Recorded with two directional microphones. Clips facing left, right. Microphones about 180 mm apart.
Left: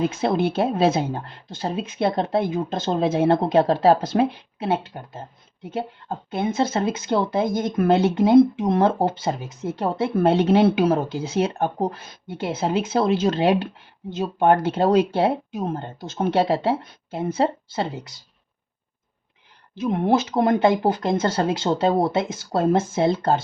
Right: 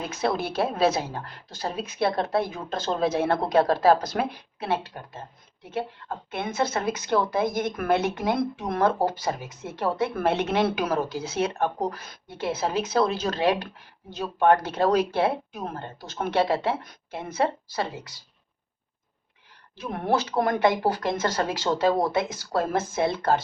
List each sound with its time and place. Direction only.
0.1 s speech: 25° left (ahead or behind)
19.7 s speech: 20° left (ahead or behind)